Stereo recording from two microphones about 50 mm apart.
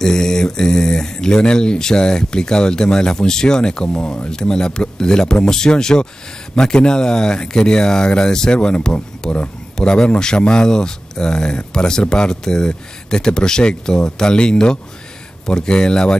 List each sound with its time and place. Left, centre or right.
0.0 s speech: centre